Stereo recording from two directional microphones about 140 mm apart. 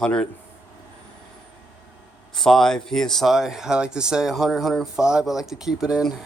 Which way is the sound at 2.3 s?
Centre (ahead or behind).